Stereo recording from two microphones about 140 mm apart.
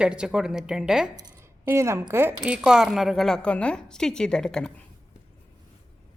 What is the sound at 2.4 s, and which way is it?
A woman's voice, 5° right (ahead or behind).